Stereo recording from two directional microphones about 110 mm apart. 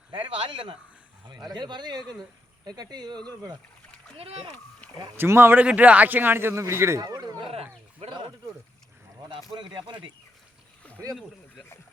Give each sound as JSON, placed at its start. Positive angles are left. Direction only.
{"t": 0.1, "sound": "speech", "side_deg": -50}
{"t": 1.3, "sound": "speech", "side_deg": -40}
{"t": 4.2, "sound": "speech", "side_deg": -65}
{"t": 5.1, "sound": "speech", "side_deg": -20}
{"t": 7.0, "sound": "a sound", "side_deg": -35}
{"t": 9.6, "sound": "speech", "side_deg": -45}
{"t": 11.1, "sound": "speech", "side_deg": 0}